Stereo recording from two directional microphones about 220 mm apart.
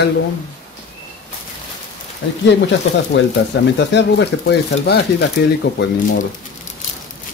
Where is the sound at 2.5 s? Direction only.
55° left (ahead or behind).